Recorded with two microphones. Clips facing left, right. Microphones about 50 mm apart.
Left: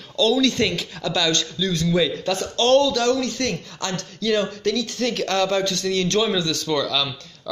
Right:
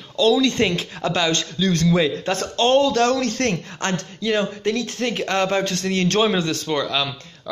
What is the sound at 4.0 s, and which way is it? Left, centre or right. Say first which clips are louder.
A man's voice: left 2 dB; right.